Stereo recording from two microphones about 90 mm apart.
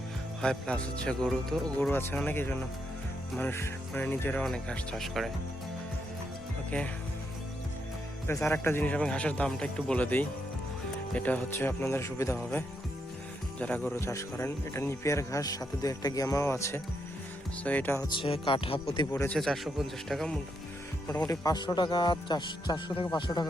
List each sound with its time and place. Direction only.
0.4 s speech: 10° left (ahead or behind)
1.9 s speech: 25° left (ahead or behind)
4.4 s speech: 10° left (ahead or behind)
8.3 s speech: 30° left (ahead or behind)
8.6 s speech: 20° left (ahead or behind)
13.6 s speech: 15° left (ahead or behind)
13.9 s speech: 35° left (ahead or behind)
17.6 s speech: 20° left (ahead or behind)
18.2 s speech: 75° left (ahead or behind)
19.4 s speech: centre (ahead or behind)
21.2 s speech: 45° left (ahead or behind)